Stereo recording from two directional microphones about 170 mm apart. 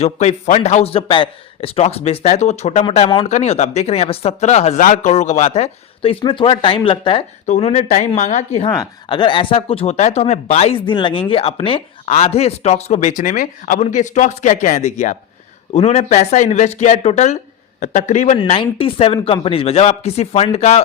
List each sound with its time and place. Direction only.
0.0 s speech: 40° left (ahead or behind)
7.4 s speech: 45° left (ahead or behind)
8.6 s speech: 30° left (ahead or behind); by 18.3 s 45° left (ahead or behind)
18.3 s speech: 30° left (ahead or behind)